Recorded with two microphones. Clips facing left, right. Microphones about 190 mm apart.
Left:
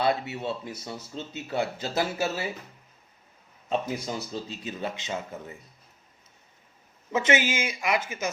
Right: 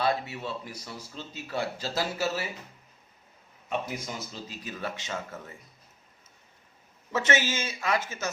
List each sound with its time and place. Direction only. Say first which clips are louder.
0.0 s speech: left 2 dB; 25° left (ahead or behind)
3.7 s speech: left 4 dB; 30° left (ahead or behind)
7.1 s speech: left 3 dB; 15° left (ahead or behind)